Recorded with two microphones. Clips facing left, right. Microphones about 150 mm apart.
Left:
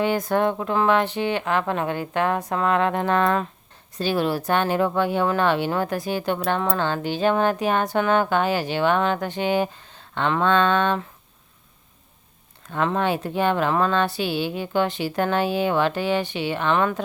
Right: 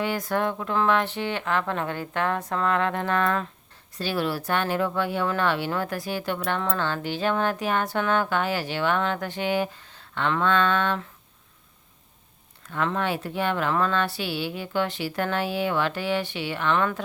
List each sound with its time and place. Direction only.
0.0 s a woman's voice: 20° left (ahead or behind)
12.7 s speech: 20° left (ahead or behind)